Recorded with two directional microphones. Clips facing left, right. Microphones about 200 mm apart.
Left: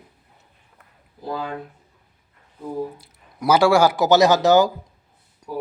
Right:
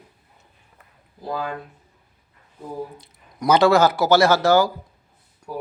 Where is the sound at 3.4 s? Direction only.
10° left (ahead or behind).